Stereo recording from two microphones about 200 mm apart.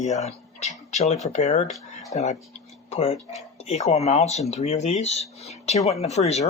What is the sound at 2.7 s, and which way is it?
Tick-tock, 30° left (ahead or behind).